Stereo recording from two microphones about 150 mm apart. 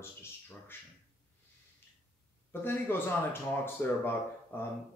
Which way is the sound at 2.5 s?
15° left (ahead or behind).